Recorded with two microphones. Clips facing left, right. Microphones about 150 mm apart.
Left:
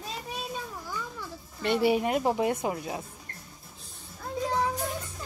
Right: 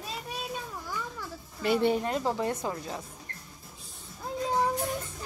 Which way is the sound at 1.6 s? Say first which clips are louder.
Left 1 dB; centre (ahead or behind).